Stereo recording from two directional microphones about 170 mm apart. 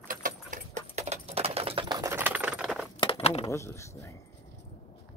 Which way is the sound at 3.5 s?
15° left (ahead or behind).